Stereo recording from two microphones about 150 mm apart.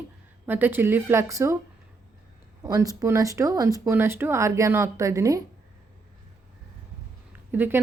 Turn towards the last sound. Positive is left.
turn(degrees=-15)  # may be behind; listen again after turning